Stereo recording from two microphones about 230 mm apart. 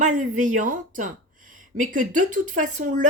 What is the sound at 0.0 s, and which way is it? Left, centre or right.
A woman's voice, right.